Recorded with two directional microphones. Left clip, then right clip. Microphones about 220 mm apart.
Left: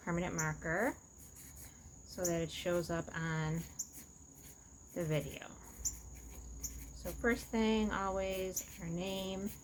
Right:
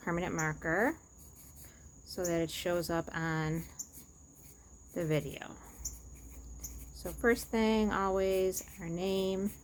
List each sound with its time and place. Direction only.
0.0 s speech: 55° right (ahead or behind)
2.1 s speech: 55° right (ahead or behind)
4.9 s speech: 55° right (ahead or behind)
7.0 s speech: 55° right (ahead or behind)